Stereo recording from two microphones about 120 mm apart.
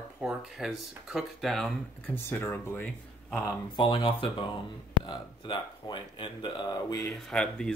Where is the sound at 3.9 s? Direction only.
50° left (ahead or behind); by 7.1 s 30° left (ahead or behind).